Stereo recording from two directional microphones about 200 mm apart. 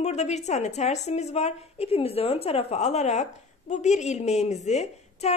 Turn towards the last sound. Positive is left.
turn(degrees=35)  # may be behind; listen again after turning